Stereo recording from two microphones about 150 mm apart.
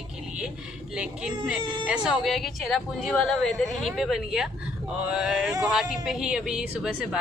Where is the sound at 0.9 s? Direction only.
5° right (ahead or behind).